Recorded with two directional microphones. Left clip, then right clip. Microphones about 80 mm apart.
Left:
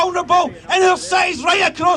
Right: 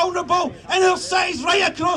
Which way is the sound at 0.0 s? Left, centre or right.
Left.